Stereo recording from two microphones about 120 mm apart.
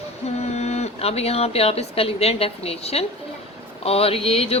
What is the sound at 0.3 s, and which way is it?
A woman's voice, 65° left (ahead or behind).